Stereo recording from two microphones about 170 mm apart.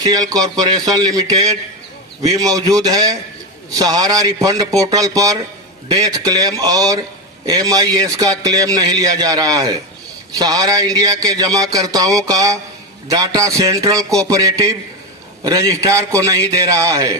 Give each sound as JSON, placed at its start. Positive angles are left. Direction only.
{"t": 0.0, "sound": "a man's voice", "side_deg": -20}
{"t": 2.4, "sound": "a man's voice", "side_deg": -20}